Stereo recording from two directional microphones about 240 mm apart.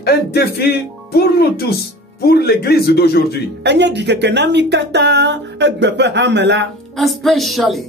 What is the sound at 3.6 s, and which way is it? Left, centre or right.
Speech, right.